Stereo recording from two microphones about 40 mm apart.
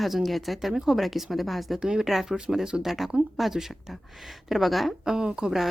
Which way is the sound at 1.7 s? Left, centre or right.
Centre.